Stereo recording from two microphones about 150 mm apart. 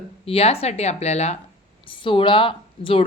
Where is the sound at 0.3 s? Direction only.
40° left (ahead or behind).